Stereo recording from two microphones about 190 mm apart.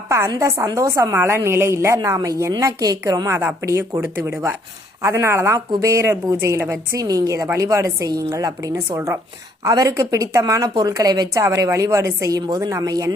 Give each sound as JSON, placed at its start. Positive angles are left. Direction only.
{"t": 0.1, "sound": "a woman's voice", "side_deg": -15}